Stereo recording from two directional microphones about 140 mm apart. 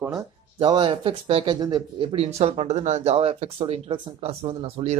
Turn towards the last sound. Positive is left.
turn(degrees=-45)  # may be behind; listen again after turning